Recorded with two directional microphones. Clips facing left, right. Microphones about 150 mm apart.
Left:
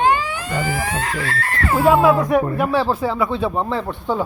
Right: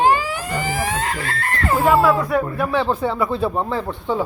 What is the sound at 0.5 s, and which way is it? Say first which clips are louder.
Speech: left 1 dB; 20° right (ahead or behind).